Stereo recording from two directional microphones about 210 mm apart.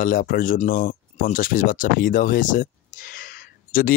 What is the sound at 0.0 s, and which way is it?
Speech, 40° left (ahead or behind).